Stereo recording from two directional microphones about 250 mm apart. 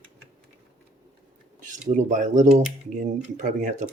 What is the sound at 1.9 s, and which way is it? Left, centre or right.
Speech, right.